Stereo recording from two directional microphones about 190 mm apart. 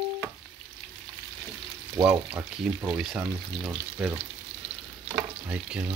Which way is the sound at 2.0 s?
5° right (ahead or behind).